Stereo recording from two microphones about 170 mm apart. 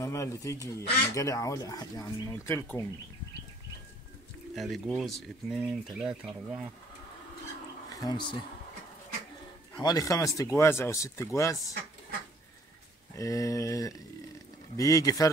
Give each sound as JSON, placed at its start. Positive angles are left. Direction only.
{"t": 0.0, "sound": "speech", "side_deg": 20}
{"t": 4.6, "sound": "speech", "side_deg": 0}
{"t": 7.9, "sound": "speech", "side_deg": 20}
{"t": 9.8, "sound": "speech", "side_deg": 20}
{"t": 13.1, "sound": "speech", "side_deg": 20}